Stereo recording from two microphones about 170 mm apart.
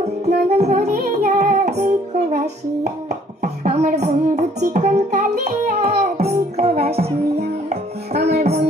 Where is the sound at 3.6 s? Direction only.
45° right (ahead or behind).